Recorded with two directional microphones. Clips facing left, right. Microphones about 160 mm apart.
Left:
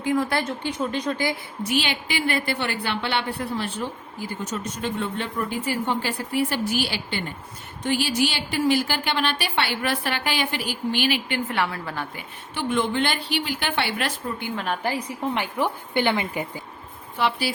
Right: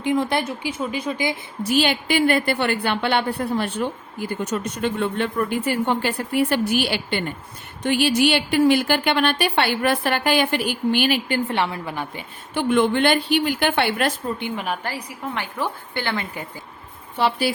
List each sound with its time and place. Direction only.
0.0 s a woman's voice: 20° right (ahead or behind)
0.4 s speech: 5° right (ahead or behind)
1.6 s a woman's voice: 45° right (ahead or behind)
4.2 s a woman's voice: 60° right (ahead or behind)
11.4 s a woman's voice: 25° right (ahead or behind)
12.5 s speech: 60° right (ahead or behind)
14.3 s speech: 20° right (ahead or behind)
14.8 s a woman's voice: 20° left (ahead or behind)